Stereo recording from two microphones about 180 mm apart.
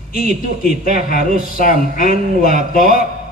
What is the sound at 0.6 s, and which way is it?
Speech, 55° left (ahead or behind).